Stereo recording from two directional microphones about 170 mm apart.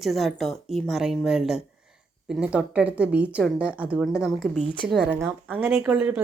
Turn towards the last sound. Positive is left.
turn(degrees=-10)  # may be behind; listen again after turning